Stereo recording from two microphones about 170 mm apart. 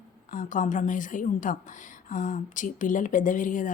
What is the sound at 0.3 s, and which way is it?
Speech, 50° left (ahead or behind).